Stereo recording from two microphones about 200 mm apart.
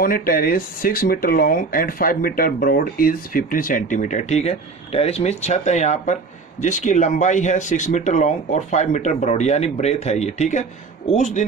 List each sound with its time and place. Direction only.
0.0 s speech: 45° left (ahead or behind)